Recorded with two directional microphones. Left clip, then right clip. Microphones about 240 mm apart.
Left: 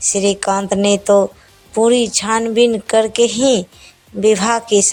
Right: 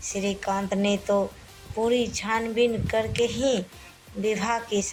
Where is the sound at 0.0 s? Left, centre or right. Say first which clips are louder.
Left 13 dB; left.